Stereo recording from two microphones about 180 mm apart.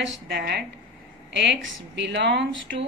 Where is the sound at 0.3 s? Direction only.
60° right (ahead or behind).